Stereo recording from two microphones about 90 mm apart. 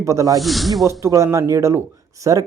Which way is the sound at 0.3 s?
Centre (ahead or behind).